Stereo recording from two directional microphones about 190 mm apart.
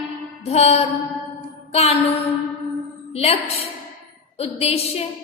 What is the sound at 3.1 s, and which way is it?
Speech, 35° left (ahead or behind).